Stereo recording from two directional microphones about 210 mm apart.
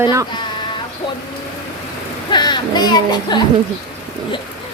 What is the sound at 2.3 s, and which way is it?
Speech, 20° left (ahead or behind).